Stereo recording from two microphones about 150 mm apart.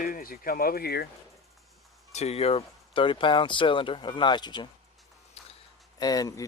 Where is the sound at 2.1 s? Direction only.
45° left (ahead or behind); by 4.6 s 30° left (ahead or behind).